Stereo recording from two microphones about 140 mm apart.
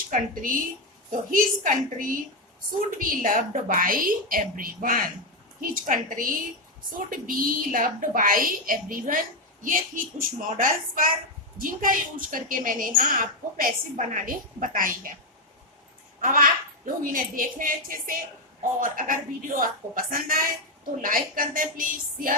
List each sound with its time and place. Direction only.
0.1 s a woman's voice: 75° right (ahead or behind)
3.0 s a woman's voice: 85° right
16.2 s a woman's voice: 85° right